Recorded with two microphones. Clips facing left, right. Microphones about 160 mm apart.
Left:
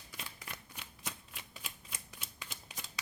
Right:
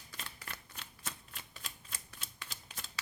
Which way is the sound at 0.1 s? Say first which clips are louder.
Even; 10° left (ahead or behind).